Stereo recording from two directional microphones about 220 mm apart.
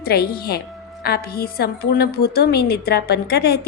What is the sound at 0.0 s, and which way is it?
A woman's voice, 45° left (ahead or behind).